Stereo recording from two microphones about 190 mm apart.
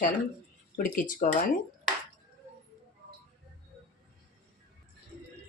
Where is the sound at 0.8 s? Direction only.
45° left (ahead or behind).